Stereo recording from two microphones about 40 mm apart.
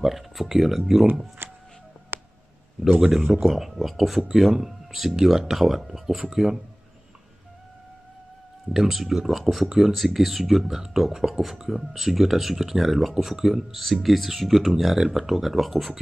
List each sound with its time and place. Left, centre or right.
0.0 s speech: centre
1.4 s music: right
2.1 s a sound: right
3.3 s speech: centre
8.7 s speech: centre